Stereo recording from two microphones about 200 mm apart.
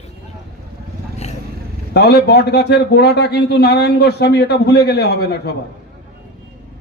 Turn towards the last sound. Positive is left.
turn(degrees=55)  # may be behind; listen again after turning